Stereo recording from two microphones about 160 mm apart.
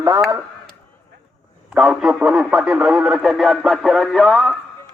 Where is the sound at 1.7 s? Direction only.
Centre (ahead or behind).